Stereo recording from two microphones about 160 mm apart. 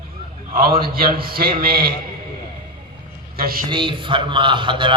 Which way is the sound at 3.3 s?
70° right (ahead or behind).